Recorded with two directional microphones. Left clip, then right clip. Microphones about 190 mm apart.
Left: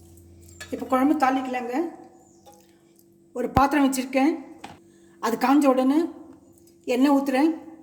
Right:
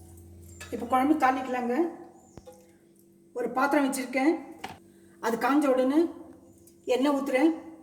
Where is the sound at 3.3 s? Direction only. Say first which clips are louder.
Left 5 dB; 45° left (ahead or behind).